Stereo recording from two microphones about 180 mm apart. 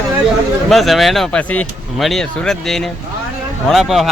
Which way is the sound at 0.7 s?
Centre (ahead or behind).